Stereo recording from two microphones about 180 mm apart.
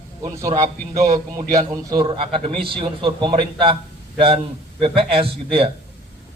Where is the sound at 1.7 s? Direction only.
20° right (ahead or behind).